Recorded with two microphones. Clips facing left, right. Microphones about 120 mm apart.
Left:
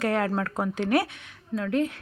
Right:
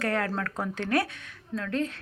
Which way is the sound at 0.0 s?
20° left (ahead or behind).